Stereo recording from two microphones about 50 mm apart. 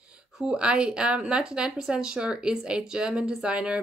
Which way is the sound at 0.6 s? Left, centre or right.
Centre.